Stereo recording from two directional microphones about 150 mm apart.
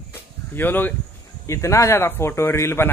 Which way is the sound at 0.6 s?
10° left (ahead or behind).